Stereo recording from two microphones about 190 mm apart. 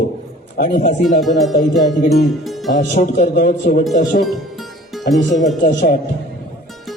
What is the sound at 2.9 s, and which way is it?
Speech, 40° left (ahead or behind).